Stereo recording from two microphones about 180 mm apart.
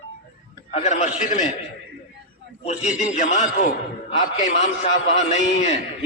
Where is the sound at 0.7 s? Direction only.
40° left (ahead or behind).